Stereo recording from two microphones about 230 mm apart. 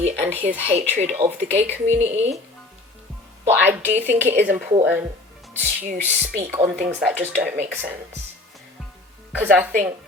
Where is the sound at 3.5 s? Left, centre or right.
Centre.